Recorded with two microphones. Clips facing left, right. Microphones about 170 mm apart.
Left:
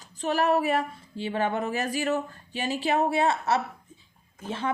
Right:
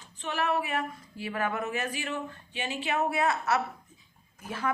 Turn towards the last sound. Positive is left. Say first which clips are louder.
# left 2 dB
turn(degrees=25)  # may be behind; listen again after turning